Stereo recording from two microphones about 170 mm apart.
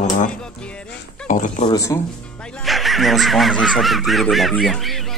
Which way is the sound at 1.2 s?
50° left (ahead or behind).